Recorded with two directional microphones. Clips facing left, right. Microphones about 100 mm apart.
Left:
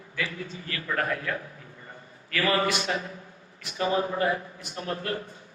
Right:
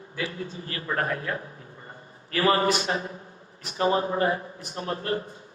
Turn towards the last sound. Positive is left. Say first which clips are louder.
# right 2 dB
turn(degrees=-30)  # may be behind; listen again after turning